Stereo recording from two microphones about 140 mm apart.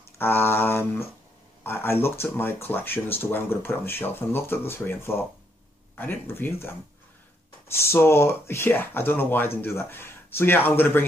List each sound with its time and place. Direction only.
0.2 s speech: 15° left (ahead or behind)